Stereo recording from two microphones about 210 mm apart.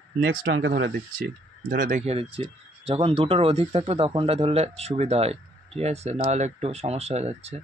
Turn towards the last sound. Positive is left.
turn(degrees=-30)  # may be behind; listen again after turning